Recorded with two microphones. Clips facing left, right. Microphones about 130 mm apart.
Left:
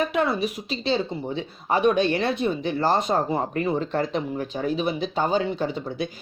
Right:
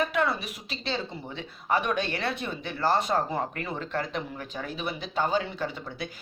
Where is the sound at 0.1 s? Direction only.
20° left (ahead or behind).